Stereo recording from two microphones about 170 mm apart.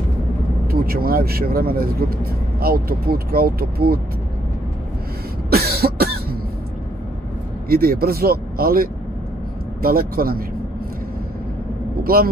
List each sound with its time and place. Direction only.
0.7 s speech: 60° right (ahead or behind)
5.5 s cough: 65° right (ahead or behind)
7.6 s speech: 60° right (ahead or behind)
12.0 s speech: 60° right (ahead or behind)